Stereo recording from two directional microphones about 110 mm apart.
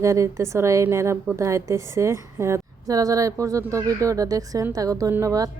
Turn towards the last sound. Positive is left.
turn(degrees=-30)  # may be behind; listen again after turning